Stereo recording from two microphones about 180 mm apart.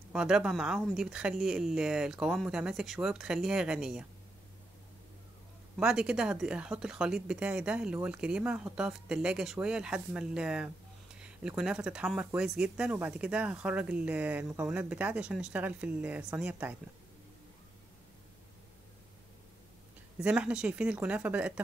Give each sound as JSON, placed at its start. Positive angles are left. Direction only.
{"t": 0.1, "sound": "speech", "side_deg": -5}
{"t": 5.8, "sound": "speech", "side_deg": -5}
{"t": 20.2, "sound": "speech", "side_deg": -5}